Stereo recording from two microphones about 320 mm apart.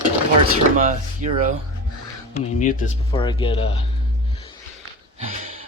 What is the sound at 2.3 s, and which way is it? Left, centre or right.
Speech, left.